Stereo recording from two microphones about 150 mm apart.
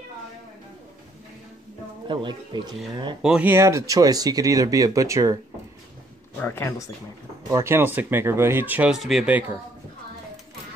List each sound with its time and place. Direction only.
2.0 s speech: 30° right (ahead or behind)
3.2 s speech: 5° right (ahead or behind)
6.4 s speech: 15° left (ahead or behind)
7.4 s speech: 20° right (ahead or behind)